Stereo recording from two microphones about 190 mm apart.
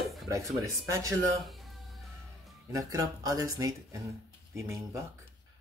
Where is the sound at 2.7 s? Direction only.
20° right (ahead or behind).